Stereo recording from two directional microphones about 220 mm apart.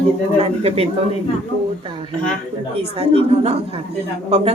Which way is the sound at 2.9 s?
25° right (ahead or behind).